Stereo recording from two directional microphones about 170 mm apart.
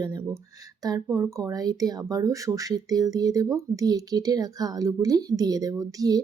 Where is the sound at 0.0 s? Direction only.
20° right (ahead or behind).